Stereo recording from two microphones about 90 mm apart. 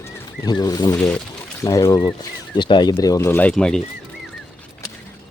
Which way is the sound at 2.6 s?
60° left (ahead or behind).